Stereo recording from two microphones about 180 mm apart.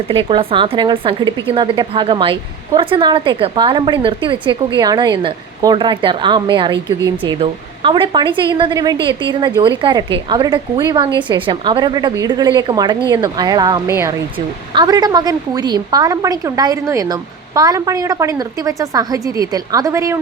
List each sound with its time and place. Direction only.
0.1 s a woman's voice: 30° right (ahead or behind)